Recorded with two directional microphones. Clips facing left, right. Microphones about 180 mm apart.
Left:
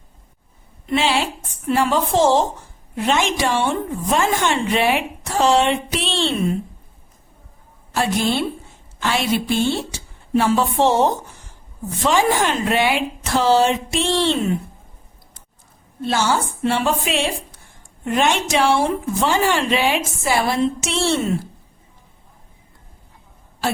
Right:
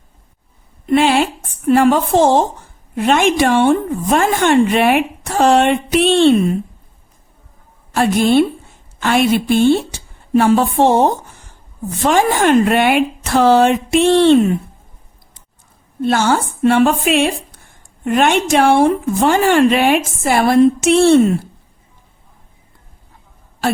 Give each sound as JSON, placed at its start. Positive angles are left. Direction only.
{"t": 0.9, "sound": "a woman's voice", "side_deg": -55}
{"t": 7.9, "sound": "a woman's voice", "side_deg": -55}
{"t": 16.0, "sound": "a woman's voice", "side_deg": -55}